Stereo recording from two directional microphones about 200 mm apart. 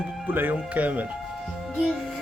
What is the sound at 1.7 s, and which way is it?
Music, centre (ahead or behind).